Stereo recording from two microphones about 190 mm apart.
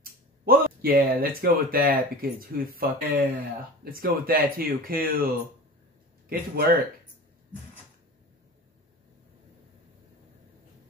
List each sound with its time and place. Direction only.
0.0 s speech: 50° right (ahead or behind)